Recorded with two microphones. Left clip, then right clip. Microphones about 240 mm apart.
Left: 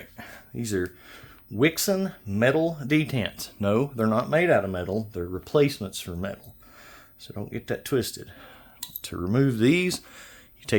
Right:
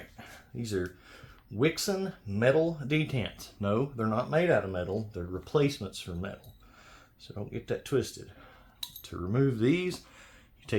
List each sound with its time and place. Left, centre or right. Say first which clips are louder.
0.2 s speech: left 7 dB; left